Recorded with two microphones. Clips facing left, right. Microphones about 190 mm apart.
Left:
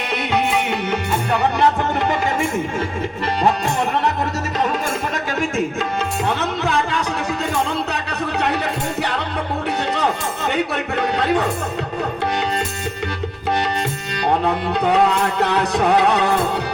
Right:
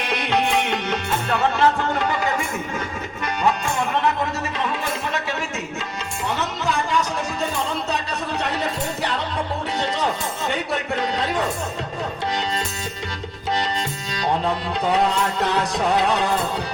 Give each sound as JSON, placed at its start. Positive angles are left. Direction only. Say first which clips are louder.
{"t": 0.1, "sound": "music", "louder": "left 1 dB", "side_deg": 5}
{"t": 5.1, "sound": "tabla", "louder": "left 5 dB", "side_deg": 50}
{"t": 10.5, "sound": "a sound", "louder": "left 4 dB", "side_deg": 60}
{"t": 15.4, "sound": "music", "louder": "left 4 dB", "side_deg": 65}